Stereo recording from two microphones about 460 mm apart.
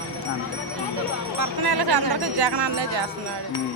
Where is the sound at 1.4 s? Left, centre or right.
Right.